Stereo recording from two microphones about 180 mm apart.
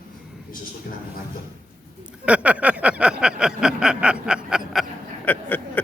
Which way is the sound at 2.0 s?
5° right (ahead or behind).